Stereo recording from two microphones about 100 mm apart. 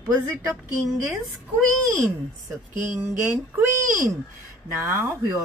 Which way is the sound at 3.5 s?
30° right (ahead or behind).